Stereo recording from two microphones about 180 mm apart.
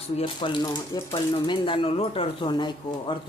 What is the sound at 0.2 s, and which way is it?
Speech, 25° left (ahead or behind).